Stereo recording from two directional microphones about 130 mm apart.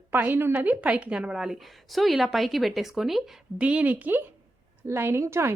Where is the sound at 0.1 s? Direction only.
15° right (ahead or behind).